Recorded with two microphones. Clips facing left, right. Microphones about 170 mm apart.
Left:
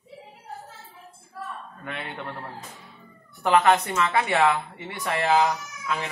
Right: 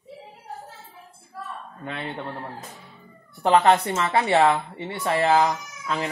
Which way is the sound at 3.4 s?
35° right (ahead or behind).